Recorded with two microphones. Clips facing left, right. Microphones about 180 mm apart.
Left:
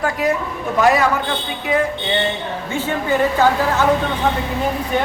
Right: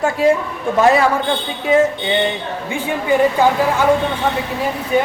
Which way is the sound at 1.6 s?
25° right (ahead or behind).